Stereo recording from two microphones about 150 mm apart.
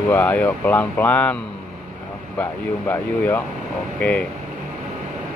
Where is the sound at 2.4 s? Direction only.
15° left (ahead or behind).